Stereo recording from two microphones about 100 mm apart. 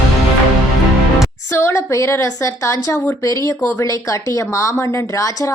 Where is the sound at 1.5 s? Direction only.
25° left (ahead or behind).